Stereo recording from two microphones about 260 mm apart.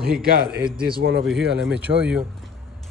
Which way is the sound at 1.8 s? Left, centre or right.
Centre.